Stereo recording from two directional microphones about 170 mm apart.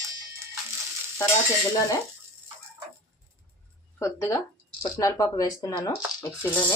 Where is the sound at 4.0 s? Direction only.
15° left (ahead or behind).